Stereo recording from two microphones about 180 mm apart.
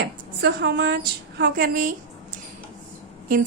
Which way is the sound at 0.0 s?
65° right (ahead or behind).